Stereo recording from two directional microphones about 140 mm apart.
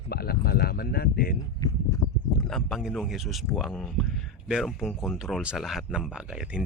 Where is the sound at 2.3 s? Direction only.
Centre (ahead or behind).